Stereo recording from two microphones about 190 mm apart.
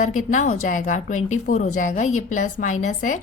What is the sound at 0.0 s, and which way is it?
A woman's voice, 40° left (ahead or behind).